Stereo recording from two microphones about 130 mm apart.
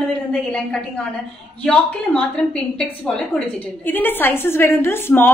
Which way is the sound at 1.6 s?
5° left (ahead or behind).